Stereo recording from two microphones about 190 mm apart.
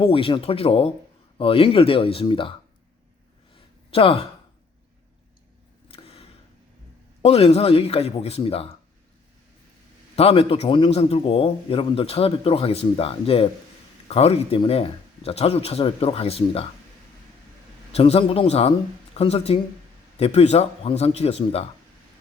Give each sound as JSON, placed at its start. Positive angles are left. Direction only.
{"t": 0.0, "sound": "speech", "side_deg": 30}
{"t": 3.5, "sound": "a sound", "side_deg": 30}
{"t": 5.9, "sound": "a sound", "side_deg": 30}
{"t": 7.2, "sound": "a man's voice", "side_deg": 30}
{"t": 10.2, "sound": "a man's voice", "side_deg": 30}
{"t": 17.9, "sound": "a man's voice", "side_deg": 30}